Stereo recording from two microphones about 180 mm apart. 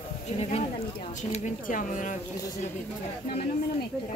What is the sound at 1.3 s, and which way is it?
Speech, 45° left (ahead or behind).